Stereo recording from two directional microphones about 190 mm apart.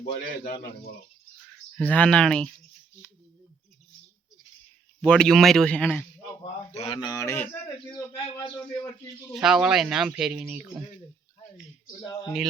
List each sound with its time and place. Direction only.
0.1 s a man's voice: 50° left (ahead or behind)
1.7 s speech: 5° left (ahead or behind)
4.9 s speech: 5° left (ahead or behind)
6.7 s speech: 35° left (ahead or behind); by 7.6 s 10° left (ahead or behind)
8.1 s speech: 25° left (ahead or behind)
8.5 s a man's voice: 15° left (ahead or behind)
9.3 s speech: 5° right (ahead or behind)
11.9 s speech: 20° left (ahead or behind)